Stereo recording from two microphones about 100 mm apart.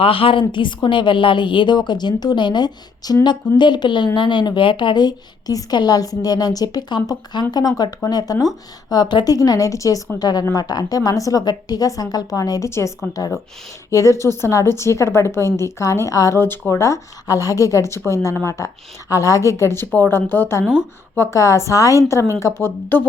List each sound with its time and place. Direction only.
0.0 s a woman's voice: 65° left (ahead or behind); by 12.9 s 30° left (ahead or behind)
13.9 s speech: 30° left (ahead or behind)